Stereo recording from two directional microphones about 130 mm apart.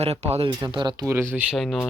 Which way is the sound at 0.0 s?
55° right (ahead or behind).